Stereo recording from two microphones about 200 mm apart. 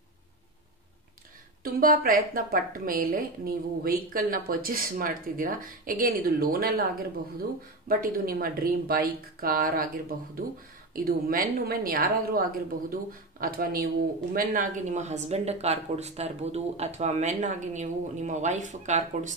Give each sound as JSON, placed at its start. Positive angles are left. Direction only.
{"t": 1.6, "sound": "a woman's voice", "side_deg": -45}